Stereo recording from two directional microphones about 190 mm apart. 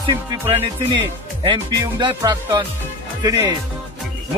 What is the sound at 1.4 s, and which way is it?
Music, 25° right (ahead or behind).